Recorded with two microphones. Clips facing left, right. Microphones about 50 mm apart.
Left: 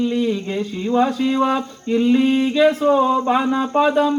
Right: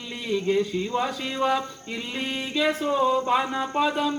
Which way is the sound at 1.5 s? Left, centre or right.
Left.